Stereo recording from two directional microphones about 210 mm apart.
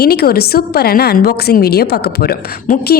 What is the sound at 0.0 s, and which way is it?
A woman's voice, 50° left (ahead or behind).